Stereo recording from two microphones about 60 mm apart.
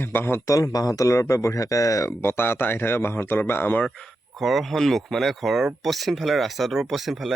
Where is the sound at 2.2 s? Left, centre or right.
Left.